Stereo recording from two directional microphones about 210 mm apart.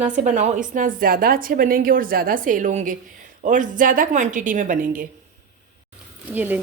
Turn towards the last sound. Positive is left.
turn(degrees=-10)  # may be behind; listen again after turning